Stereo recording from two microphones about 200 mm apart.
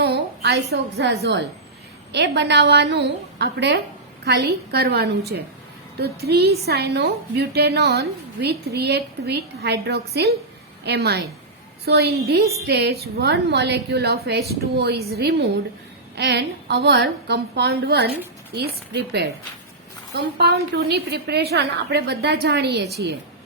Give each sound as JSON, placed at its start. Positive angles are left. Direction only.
{"t": 0.0, "sound": "a woman's voice", "side_deg": -55}